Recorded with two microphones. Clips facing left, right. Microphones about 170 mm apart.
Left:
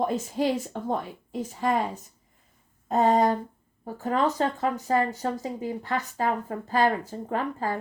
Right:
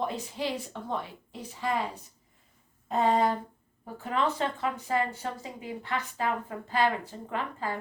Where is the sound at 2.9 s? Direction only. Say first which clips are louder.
Left 4 dB; 45° left (ahead or behind).